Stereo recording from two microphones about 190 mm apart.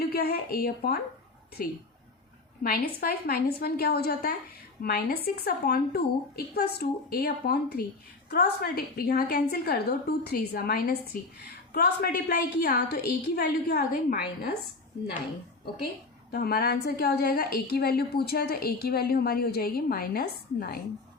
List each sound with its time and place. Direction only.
0.0 s a woman's voice: 55° left (ahead or behind)
2.6 s a woman's voice: 50° left (ahead or behind)
16.3 s a woman's voice: 55° left (ahead or behind)